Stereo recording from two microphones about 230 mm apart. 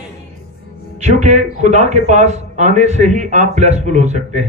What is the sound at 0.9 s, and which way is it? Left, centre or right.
Speech, right.